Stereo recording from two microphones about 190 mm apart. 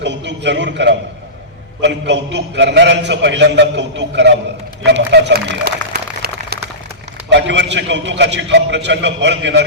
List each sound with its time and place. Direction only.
0.0 s a man's voice: 65° right (ahead or behind)
4.9 s a sound: 65° right (ahead or behind)
7.3 s a man's voice: 70° right (ahead or behind)